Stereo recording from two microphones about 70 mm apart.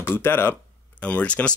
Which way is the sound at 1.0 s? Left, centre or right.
Centre.